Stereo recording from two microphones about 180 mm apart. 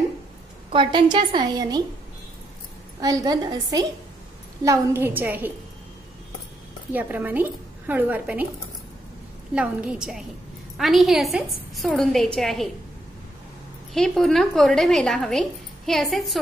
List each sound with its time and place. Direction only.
0.7 s a woman's voice: 25° right (ahead or behind)
3.0 s a woman's voice: 20° right (ahead or behind)
6.9 s a woman's voice: 10° right (ahead or behind)
9.5 s speech: 5° right (ahead or behind)
13.9 s speech: centre (ahead or behind)